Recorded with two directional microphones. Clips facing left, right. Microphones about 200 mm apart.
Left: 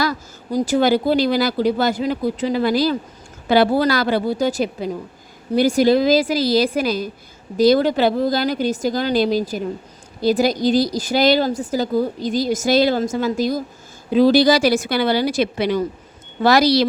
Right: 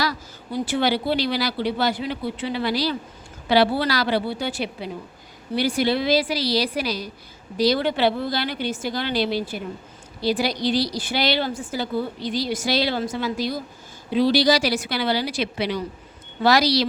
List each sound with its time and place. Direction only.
0.0 s speech: 45° left (ahead or behind)